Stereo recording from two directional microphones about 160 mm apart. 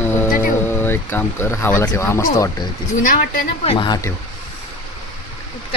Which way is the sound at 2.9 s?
55° left (ahead or behind).